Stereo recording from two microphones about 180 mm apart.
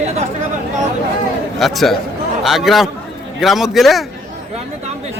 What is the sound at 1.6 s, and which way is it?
A man's voice, centre (ahead or behind).